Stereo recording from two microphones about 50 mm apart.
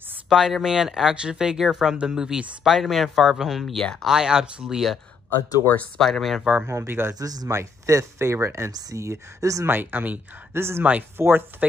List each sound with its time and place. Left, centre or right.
0.3 s speech: centre
4.0 s speech: centre
5.9 s speech: centre
6.9 s speech: right
9.7 s speech: right
10.5 s speech: right
10.8 s speech: right
11.1 s speech: right